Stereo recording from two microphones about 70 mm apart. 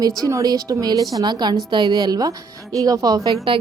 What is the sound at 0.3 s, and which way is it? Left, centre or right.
Speech, right.